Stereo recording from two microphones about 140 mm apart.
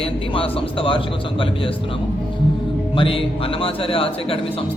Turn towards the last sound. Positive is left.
turn(degrees=40)  # may be behind; listen again after turning